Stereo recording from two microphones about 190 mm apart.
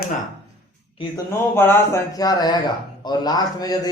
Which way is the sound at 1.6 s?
15° left (ahead or behind).